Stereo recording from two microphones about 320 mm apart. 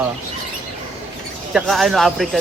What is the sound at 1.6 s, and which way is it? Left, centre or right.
Speech, centre.